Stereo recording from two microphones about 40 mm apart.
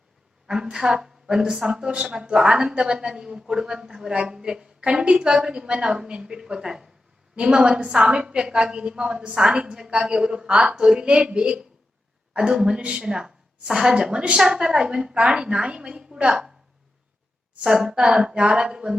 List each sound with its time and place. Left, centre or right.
0.4 s a woman's voice: centre
16.3 s a woman's voice: centre
17.6 s a woman's voice: centre
17.8 s a woman's voice: right